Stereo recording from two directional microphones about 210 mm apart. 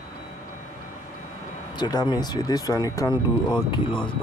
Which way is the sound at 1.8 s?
20° left (ahead or behind).